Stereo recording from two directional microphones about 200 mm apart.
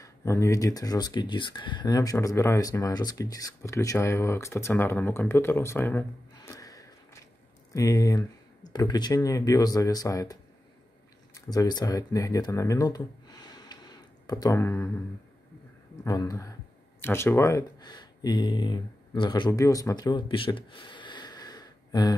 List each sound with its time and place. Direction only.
0.0 s speech: 15° left (ahead or behind)
16.0 s speech: 15° left (ahead or behind)